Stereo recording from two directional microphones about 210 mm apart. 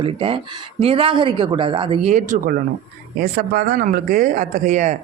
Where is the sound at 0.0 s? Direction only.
25° right (ahead or behind).